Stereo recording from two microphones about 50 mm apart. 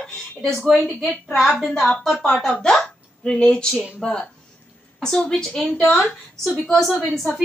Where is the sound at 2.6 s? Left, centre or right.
Centre.